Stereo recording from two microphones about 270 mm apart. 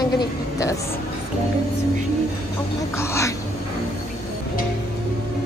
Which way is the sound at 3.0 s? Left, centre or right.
Centre.